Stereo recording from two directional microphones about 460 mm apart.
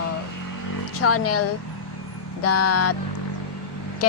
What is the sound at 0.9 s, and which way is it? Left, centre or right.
Speech, left.